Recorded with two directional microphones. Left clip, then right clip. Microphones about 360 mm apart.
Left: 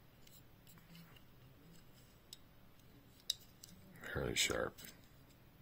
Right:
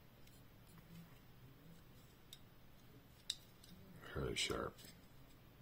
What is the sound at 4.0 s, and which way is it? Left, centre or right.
Speech, left.